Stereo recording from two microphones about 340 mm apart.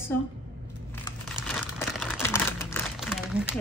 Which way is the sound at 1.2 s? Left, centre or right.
Centre.